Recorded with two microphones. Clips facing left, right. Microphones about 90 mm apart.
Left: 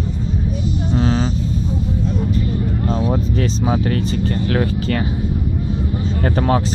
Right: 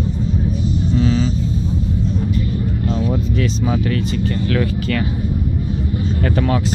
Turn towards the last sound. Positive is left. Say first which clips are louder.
# left 1 dB
turn(degrees=35)  # may be behind; listen again after turning